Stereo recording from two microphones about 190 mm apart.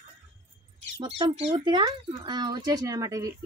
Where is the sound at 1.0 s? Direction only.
25° right (ahead or behind).